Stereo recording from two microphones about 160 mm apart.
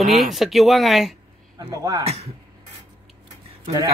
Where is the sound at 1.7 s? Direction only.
20° right (ahead or behind).